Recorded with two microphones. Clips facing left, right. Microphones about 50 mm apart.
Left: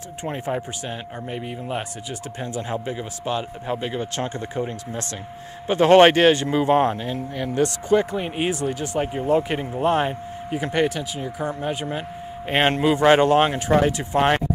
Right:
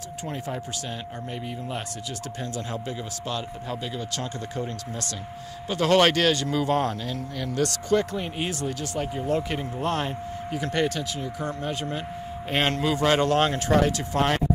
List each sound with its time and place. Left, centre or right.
0.2 s speech: left
5.7 s speech: left